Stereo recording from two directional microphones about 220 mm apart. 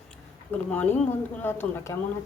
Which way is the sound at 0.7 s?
5° left (ahead or behind).